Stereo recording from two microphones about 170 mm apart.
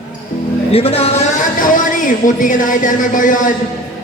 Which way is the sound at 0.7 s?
35° left (ahead or behind).